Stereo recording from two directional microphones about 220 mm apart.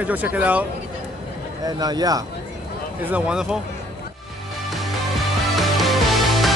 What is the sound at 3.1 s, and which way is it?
Speech, 5° right (ahead or behind).